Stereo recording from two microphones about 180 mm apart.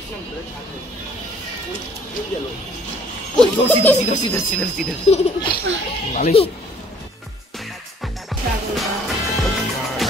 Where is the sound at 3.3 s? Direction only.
10° left (ahead or behind).